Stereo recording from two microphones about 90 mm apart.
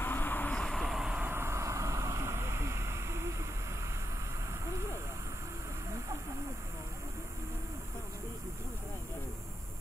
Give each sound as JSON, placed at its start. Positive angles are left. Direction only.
{"t": 0.0, "sound": "vehicle", "side_deg": 20}
{"t": 1.2, "sound": "vehicle", "side_deg": -25}